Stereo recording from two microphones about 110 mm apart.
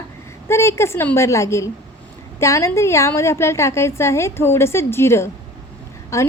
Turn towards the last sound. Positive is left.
turn(degrees=25)  # may be behind; listen again after turning